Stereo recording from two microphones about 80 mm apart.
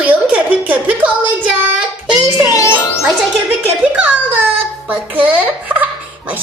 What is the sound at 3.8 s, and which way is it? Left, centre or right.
A child's voice, centre.